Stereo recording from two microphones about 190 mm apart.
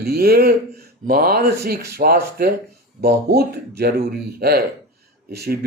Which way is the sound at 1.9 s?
55° right (ahead or behind).